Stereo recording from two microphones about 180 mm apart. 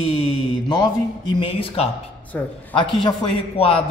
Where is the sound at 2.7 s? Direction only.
30° left (ahead or behind).